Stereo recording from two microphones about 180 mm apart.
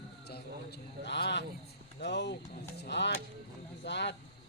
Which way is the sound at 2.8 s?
75° left (ahead or behind).